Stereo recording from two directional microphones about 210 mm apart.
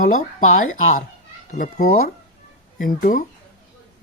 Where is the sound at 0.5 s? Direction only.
35° left (ahead or behind).